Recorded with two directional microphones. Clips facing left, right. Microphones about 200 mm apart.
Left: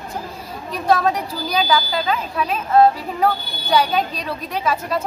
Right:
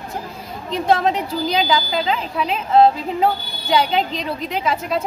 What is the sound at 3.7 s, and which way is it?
A woman's voice, 20° right (ahead or behind).